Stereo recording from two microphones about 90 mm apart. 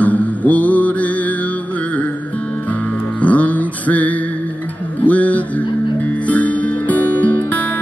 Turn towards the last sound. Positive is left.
turn(degrees=15)  # may be behind; listen again after turning